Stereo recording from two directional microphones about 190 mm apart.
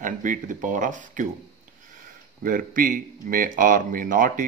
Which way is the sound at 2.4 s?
45° right (ahead or behind).